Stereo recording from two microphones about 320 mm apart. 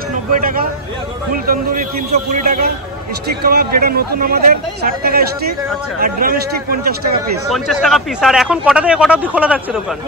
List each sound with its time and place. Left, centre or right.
1.3 s speech: right
7.5 s speech: centre